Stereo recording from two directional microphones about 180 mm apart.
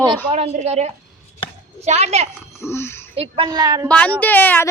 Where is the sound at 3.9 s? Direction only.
5° left (ahead or behind).